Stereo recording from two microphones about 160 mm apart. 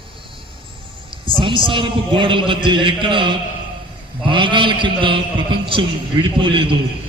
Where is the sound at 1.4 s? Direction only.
30° right (ahead or behind).